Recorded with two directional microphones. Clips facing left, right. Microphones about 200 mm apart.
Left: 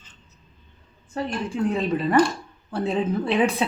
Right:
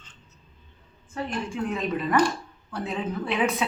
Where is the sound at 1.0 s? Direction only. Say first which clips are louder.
Left 3 dB; 35° left (ahead or behind).